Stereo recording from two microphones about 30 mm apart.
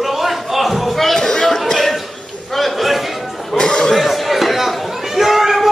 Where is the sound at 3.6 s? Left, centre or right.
Left.